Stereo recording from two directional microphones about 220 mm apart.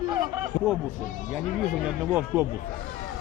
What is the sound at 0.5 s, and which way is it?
Speech, 30° left (ahead or behind).